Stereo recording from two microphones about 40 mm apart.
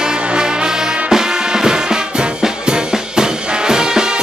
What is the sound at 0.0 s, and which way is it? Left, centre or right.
Music, centre.